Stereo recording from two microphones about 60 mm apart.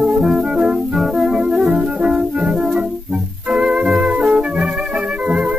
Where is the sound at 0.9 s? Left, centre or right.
Centre.